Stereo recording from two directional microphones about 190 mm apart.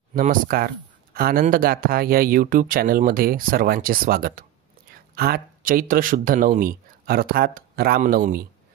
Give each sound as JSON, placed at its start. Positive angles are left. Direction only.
{"t": 0.1, "sound": "speech", "side_deg": -45}